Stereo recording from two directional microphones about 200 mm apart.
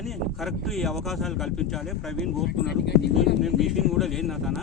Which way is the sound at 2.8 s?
55° left (ahead or behind).